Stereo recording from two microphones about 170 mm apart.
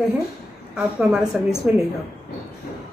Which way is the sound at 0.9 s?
5° right (ahead or behind).